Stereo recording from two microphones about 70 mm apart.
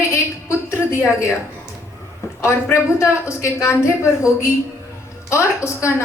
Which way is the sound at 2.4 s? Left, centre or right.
Left.